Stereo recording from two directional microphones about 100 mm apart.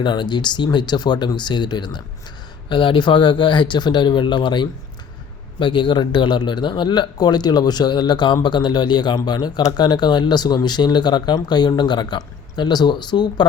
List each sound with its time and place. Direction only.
0.0 s a man's voice: 50° left (ahead or behind)